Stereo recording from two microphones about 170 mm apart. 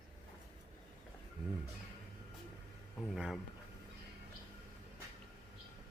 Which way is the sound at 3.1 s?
Centre (ahead or behind).